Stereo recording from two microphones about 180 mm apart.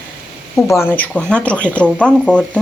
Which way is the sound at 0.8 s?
10° left (ahead or behind).